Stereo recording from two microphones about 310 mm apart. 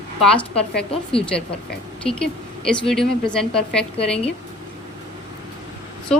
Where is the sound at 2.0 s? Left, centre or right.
Centre.